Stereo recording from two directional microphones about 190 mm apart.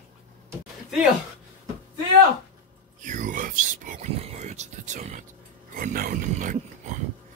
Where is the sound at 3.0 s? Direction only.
45° right (ahead or behind).